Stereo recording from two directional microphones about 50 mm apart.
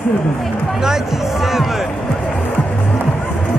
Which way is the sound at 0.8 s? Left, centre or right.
Centre.